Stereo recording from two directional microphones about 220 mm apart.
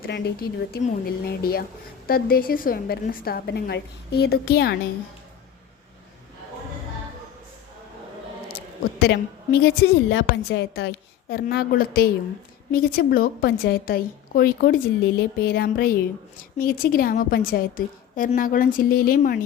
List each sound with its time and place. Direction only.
0.0 s a woman's voice: 45° left (ahead or behind)
9.0 s a woman's voice: 45° left (ahead or behind)